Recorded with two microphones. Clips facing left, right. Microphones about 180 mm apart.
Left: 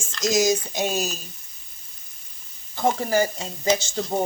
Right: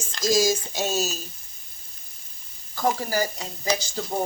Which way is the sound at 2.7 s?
25° left (ahead or behind).